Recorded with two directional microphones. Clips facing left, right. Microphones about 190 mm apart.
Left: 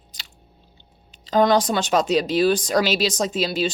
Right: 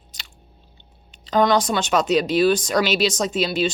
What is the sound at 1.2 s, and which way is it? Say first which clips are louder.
Speech: left 1 dB; 35° left (ahead or behind).